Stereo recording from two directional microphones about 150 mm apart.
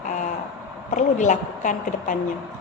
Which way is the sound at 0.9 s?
55° left (ahead or behind).